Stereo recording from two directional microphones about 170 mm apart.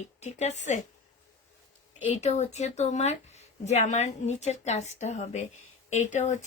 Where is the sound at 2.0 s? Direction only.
40° left (ahead or behind).